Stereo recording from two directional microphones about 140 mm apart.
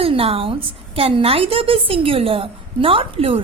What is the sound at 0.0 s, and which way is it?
A woman's voice, 40° right (ahead or behind).